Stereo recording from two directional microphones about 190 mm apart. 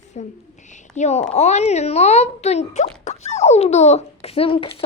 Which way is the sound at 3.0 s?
35° left (ahead or behind).